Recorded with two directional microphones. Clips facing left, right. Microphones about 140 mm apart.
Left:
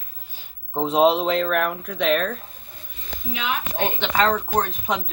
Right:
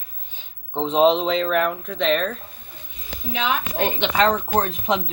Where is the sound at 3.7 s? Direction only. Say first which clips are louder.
Right 1 dB; 20° right (ahead or behind).